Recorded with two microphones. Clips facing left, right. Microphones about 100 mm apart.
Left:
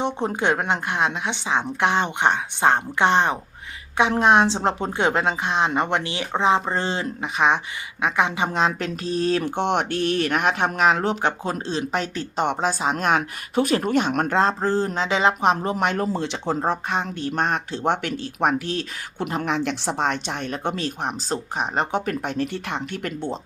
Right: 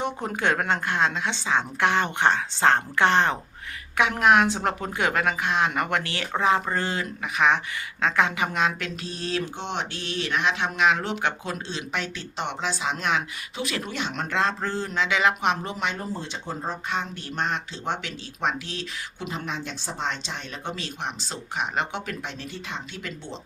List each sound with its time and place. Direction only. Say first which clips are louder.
0.0 s a woman's voice: left 3 dB; 25° left (ahead or behind)
8.5 s speech: left 3 dB; 35° left (ahead or behind)
9.4 s speech: left 8 dB; 60° left (ahead or behind)
14.3 s speech: left 4 dB; 35° left (ahead or behind)
16.0 s speech: left 8 dB; 85° left
16.9 s speech: left 5 dB; 50° left (ahead or behind)
19.4 s speech: left 9 dB; 65° left (ahead or behind)